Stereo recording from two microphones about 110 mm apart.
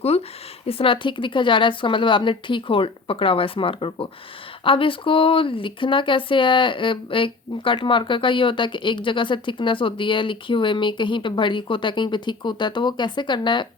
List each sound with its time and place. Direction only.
0.7 s speech: 55° left (ahead or behind)